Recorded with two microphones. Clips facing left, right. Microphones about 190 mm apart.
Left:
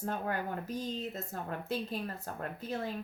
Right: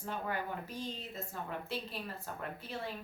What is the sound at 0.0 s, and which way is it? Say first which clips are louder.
Speech: left 3 dB; 45° left (ahead or behind).